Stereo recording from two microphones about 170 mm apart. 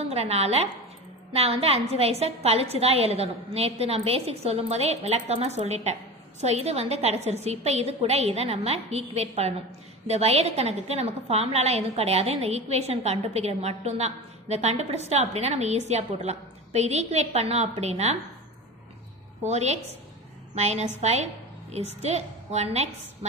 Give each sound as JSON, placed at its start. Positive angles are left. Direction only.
{"t": 0.0, "sound": "a woman's voice", "side_deg": -40}
{"t": 19.4, "sound": "a woman's voice", "side_deg": -40}